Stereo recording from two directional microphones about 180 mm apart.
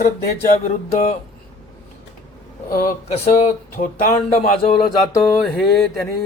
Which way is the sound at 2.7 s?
50° left (ahead or behind).